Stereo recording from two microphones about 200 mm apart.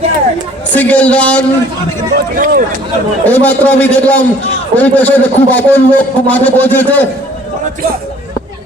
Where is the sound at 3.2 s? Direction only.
10° left (ahead or behind).